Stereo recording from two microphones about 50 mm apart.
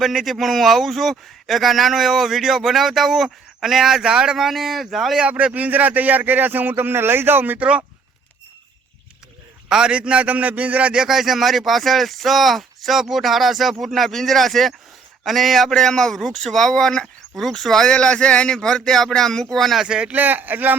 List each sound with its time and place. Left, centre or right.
0.0 s speech: centre
4.4 s speech: centre
5.3 s speech: right
9.6 s a man's voice: centre
10.9 s speech: centre
17.9 s speech: left; by 19.8 s centre
19.8 s speech: centre
20.1 s speech: right